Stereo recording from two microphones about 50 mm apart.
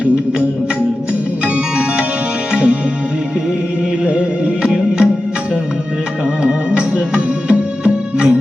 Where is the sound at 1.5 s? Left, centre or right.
Centre.